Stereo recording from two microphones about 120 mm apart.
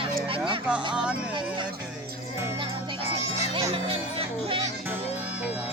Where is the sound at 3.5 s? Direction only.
50° right (ahead or behind).